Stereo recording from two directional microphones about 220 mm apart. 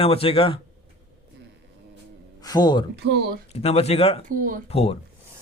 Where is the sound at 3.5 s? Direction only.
30° left (ahead or behind).